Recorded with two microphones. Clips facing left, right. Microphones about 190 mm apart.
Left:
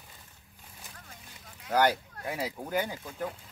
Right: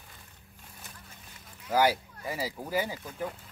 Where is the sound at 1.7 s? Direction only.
5° right (ahead or behind).